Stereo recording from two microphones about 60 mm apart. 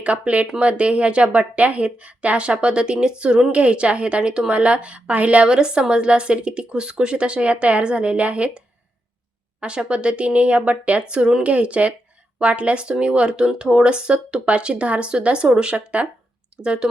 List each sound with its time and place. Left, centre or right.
0.0 s a woman's voice: right